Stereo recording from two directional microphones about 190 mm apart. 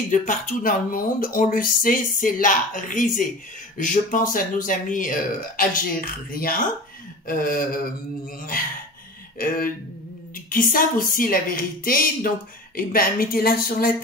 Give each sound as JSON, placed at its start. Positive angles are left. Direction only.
{"t": 0.1, "sound": "speech", "side_deg": 40}
{"t": 10.3, "sound": "speech", "side_deg": 45}